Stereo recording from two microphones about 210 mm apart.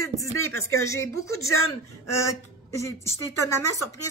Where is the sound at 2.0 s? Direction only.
15° left (ahead or behind).